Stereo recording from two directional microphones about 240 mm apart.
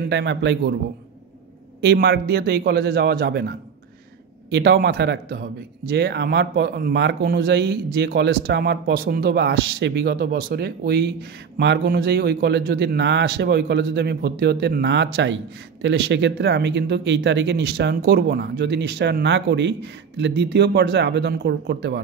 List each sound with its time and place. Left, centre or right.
0.1 s speech: right
1.8 s a man's voice: right